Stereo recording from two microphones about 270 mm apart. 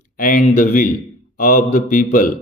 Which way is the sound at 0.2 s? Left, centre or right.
Left.